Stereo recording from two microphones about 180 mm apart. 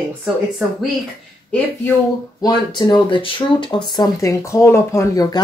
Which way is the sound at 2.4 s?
25° left (ahead or behind).